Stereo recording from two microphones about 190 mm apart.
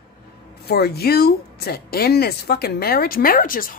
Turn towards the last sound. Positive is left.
turn(degrees=50)  # may be behind; listen again after turning